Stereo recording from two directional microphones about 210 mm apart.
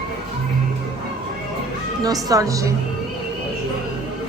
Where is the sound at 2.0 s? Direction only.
15° right (ahead or behind).